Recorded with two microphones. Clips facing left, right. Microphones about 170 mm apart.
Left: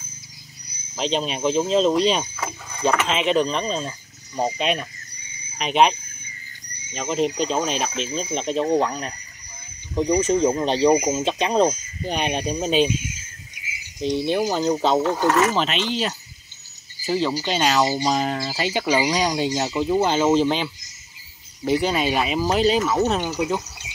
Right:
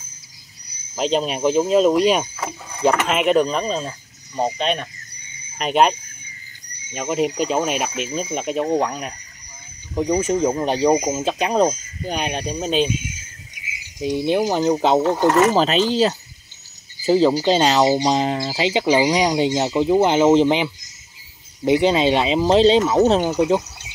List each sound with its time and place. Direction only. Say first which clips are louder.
0.9 s speech: right 4 dB; 5° right (ahead or behind)
10.2 s speech: even; 5° right (ahead or behind)
14.0 s speech: right 2 dB; 15° right (ahead or behind)
15.5 s speech: right 6 dB; 35° right (ahead or behind)